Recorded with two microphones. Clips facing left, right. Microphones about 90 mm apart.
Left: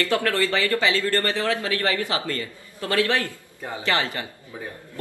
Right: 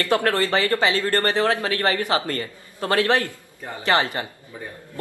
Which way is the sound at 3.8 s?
20° right (ahead or behind).